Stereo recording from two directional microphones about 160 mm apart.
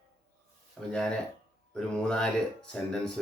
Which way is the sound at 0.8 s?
5° left (ahead or behind).